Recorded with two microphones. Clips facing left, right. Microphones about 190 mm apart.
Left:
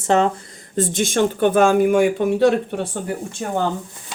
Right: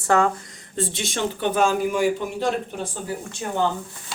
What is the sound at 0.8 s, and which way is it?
Speech, 45° left (ahead or behind).